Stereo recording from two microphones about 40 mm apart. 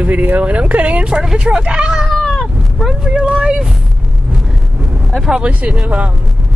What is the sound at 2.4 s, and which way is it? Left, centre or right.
Cat, centre.